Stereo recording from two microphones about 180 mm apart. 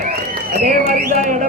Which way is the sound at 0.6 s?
50° right (ahead or behind).